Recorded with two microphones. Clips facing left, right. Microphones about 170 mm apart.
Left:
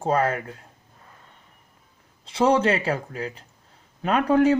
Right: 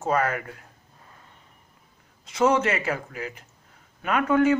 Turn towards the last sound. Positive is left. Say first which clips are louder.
# left 2 dB
turn(degrees=35)  # may be behind; listen again after turning